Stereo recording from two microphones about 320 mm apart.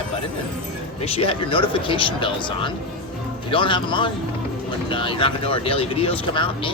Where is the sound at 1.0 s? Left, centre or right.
Centre.